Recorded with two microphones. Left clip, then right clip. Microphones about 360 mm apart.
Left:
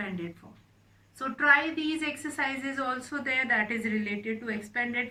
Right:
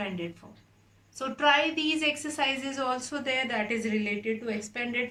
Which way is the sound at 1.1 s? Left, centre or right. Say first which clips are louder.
Left 1 dB; centre.